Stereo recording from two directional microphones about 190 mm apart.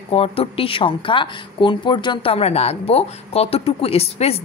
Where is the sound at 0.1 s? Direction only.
30° left (ahead or behind).